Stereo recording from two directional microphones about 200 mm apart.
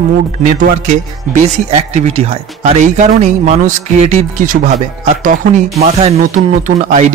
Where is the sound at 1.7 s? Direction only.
30° right (ahead or behind).